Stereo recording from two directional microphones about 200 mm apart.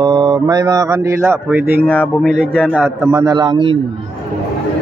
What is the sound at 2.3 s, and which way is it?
Speech, 5° right (ahead or behind).